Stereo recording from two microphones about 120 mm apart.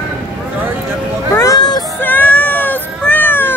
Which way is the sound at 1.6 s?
35° left (ahead or behind).